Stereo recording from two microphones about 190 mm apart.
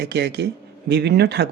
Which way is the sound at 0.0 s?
60° right (ahead or behind).